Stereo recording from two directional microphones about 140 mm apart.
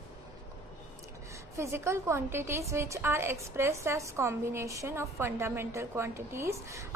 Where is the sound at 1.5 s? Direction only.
20° right (ahead or behind).